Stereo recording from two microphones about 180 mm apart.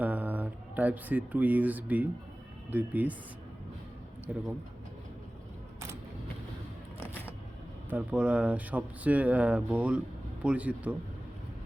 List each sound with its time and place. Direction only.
0.0 s speech: 10° right (ahead or behind)
4.3 s speech: 5° right (ahead or behind)
7.9 s speech: 5° right (ahead or behind)